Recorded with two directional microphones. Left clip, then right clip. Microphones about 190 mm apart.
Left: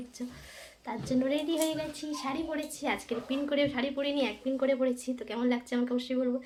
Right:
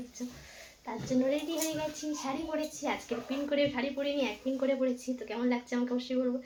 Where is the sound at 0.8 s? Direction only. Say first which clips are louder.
Even; 35° left (ahead or behind).